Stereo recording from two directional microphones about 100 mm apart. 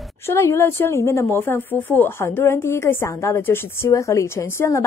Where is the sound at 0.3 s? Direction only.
25° left (ahead or behind).